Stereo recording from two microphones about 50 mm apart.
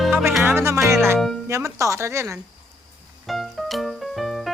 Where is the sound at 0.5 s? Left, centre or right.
Right.